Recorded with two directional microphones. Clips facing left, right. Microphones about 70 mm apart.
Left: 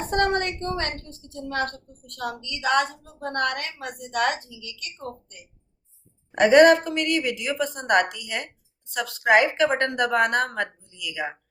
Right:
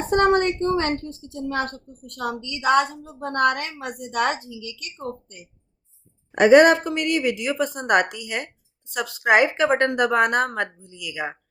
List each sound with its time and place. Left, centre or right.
0.1 s a woman's voice: centre
6.3 s a woman's voice: centre